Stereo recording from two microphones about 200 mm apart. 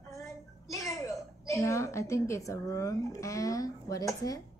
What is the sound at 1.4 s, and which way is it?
A woman's voice, 15° left (ahead or behind).